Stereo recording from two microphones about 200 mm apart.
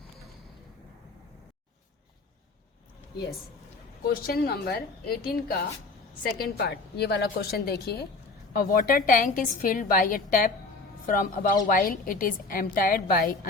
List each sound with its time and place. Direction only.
4.3 s a woman's voice: 55° left (ahead or behind)
8.5 s a woman's voice: 45° left (ahead or behind)